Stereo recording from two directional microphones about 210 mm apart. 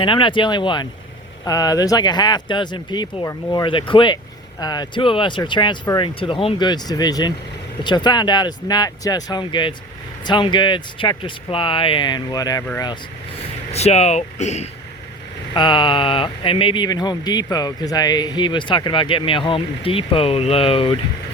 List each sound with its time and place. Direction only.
0.0 s speech: 25° left (ahead or behind)
13.7 s speech: 30° left (ahead or behind)
15.5 s speech: 20° left (ahead or behind)